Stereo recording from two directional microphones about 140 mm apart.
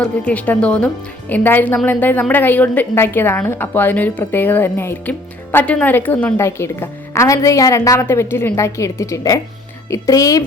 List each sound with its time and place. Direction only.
0.0 s a woman's voice: 10° left (ahead or behind)